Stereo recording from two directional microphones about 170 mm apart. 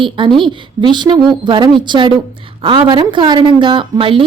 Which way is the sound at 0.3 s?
30° right (ahead or behind).